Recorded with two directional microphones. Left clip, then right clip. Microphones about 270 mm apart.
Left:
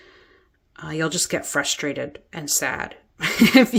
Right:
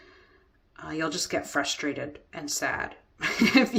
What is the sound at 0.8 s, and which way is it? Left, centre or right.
Speech, left.